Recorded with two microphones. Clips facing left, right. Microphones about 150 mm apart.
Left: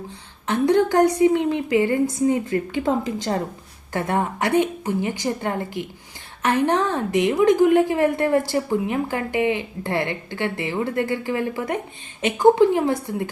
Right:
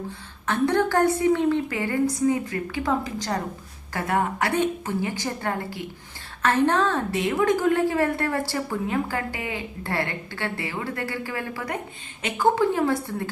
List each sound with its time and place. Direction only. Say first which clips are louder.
0.4 s a woman's voice: left 4 dB; 20° left (ahead or behind)